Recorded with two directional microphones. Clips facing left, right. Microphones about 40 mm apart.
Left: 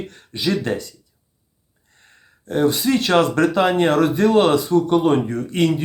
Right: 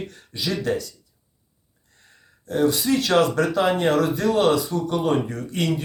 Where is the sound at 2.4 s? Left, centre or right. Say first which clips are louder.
Left 3 dB; left.